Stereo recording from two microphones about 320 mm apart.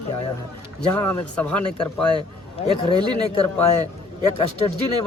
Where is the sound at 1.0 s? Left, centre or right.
Centre.